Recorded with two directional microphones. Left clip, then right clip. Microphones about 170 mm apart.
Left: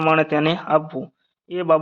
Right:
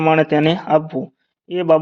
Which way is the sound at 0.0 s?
25° right (ahead or behind).